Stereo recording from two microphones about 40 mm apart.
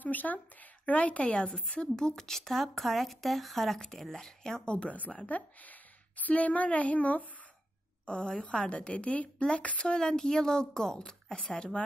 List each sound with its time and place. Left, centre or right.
0.0 s speech: left
0.8 s a woman's voice: left; by 4.6 s centre
4.6 s a woman's voice: left
5.3 s a child's voice: left
8.1 s a woman's voice: centre